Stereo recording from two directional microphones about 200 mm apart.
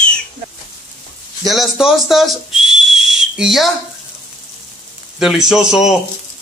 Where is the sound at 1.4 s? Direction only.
Centre (ahead or behind).